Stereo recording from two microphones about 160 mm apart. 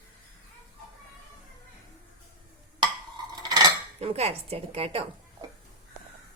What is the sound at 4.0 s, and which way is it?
Speech, 40° right (ahead or behind).